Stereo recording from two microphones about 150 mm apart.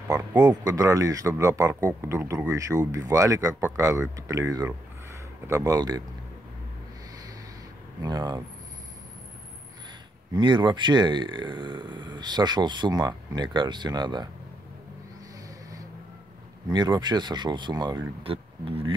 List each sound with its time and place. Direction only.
0.1 s speech: 25° right (ahead or behind)
8.0 s speech: 30° right (ahead or behind)
10.3 s speech: 30° right (ahead or behind)
16.7 s speech: 30° right (ahead or behind)